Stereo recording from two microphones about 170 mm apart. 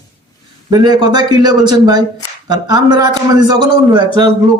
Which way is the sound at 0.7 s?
25° right (ahead or behind).